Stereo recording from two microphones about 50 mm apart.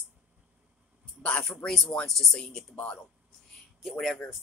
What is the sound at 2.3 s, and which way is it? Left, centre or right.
Speech, centre.